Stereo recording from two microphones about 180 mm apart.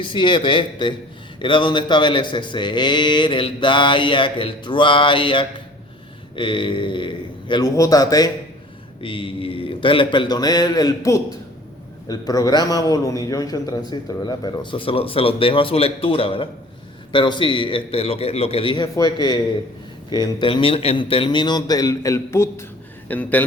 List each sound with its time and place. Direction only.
0.0 s a man's voice: 25° left (ahead or behind); by 23.4 s 10° left (ahead or behind)